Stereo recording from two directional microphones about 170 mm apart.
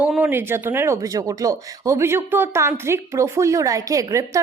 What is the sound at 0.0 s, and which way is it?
Speech, 10° right (ahead or behind).